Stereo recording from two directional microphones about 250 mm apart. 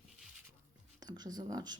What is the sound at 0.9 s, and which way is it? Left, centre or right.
Speech, centre.